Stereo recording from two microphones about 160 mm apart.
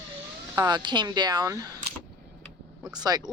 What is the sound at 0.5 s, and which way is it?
Speech, 25° right (ahead or behind).